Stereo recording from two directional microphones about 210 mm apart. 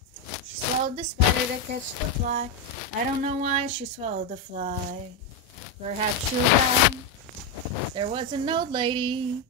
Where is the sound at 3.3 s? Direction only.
30° right (ahead or behind).